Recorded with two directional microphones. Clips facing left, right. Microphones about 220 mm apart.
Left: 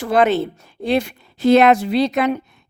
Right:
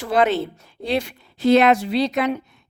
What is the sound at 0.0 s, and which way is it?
Speech, 50° left (ahead or behind).